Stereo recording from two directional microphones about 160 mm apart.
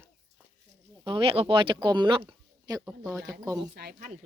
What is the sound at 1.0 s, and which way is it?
Speech, 35° right (ahead or behind).